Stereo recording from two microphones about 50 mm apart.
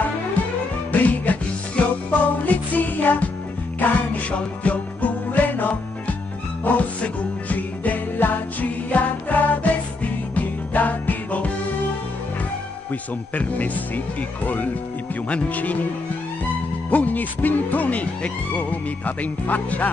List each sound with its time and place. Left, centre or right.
1.0 s music: left
13.3 s speech: left
16.9 s speech: left